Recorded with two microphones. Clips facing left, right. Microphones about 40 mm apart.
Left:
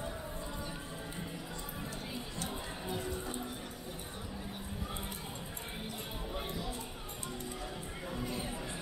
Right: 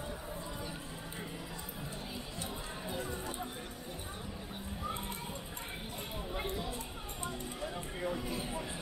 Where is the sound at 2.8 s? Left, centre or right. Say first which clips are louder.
Left 1 dB; centre.